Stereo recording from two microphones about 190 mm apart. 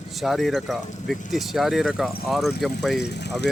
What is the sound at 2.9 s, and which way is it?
Speech, 60° left (ahead or behind).